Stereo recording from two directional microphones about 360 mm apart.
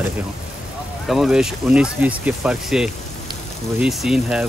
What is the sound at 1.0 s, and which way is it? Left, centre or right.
Speech, centre.